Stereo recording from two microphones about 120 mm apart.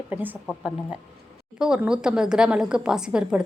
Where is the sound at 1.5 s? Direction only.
5° right (ahead or behind).